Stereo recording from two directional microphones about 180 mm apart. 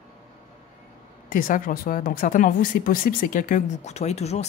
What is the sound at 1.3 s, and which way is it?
Speech, 50° left (ahead or behind).